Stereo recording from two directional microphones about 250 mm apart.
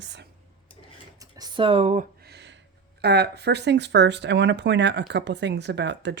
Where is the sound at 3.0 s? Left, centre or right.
Right.